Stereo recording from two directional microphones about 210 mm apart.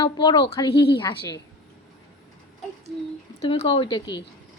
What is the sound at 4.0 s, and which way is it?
Speech, 55° left (ahead or behind).